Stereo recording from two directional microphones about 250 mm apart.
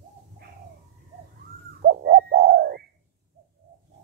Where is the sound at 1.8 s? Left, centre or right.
Right.